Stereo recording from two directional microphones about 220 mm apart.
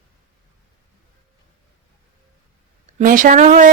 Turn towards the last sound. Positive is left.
turn(degrees=-35)  # may be behind; listen again after turning